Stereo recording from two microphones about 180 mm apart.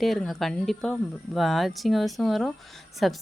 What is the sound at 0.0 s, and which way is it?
A woman's voice, centre (ahead or behind).